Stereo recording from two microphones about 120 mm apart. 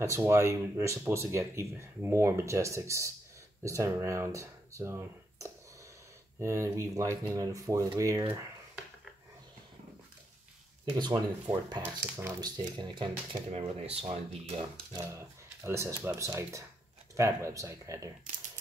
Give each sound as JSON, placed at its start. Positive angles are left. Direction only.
{"t": 0.0, "sound": "speech", "side_deg": -25}
{"t": 11.0, "sound": "speech", "side_deg": -35}
{"t": 11.8, "sound": "speech", "side_deg": -20}
{"t": 12.4, "sound": "speech", "side_deg": -35}
{"t": 13.5, "sound": "speech", "side_deg": -60}
{"t": 14.9, "sound": "speech", "side_deg": -25}